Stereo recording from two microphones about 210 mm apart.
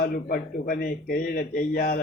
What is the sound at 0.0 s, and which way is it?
A man's voice, 45° left (ahead or behind).